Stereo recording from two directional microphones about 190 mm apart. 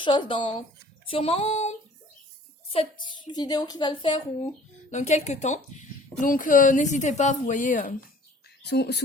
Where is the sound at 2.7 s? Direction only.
30° left (ahead or behind).